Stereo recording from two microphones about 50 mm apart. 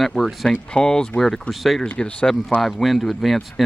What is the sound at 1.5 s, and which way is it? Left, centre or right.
Speech, centre.